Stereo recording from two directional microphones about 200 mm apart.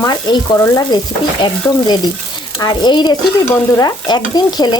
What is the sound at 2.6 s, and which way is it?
Stir, 20° left (ahead or behind).